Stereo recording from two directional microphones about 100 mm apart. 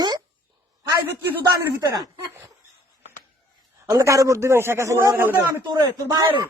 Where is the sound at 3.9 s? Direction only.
35° right (ahead or behind).